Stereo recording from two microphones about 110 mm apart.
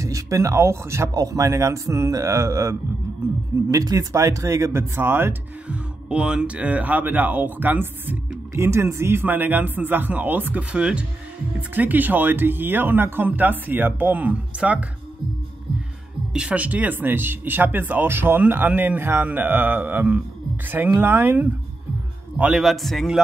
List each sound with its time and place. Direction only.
0.0 s speech: 30° right (ahead or behind)
6.0 s speech: 10° right (ahead or behind)
16.3 s speech: 10° right (ahead or behind)
22.4 s a man's voice: 5° right (ahead or behind)